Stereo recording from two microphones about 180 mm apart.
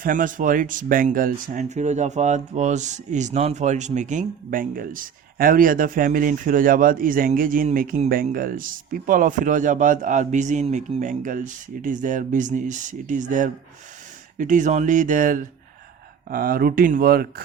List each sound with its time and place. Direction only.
0.0 s speech: 50° right (ahead or behind)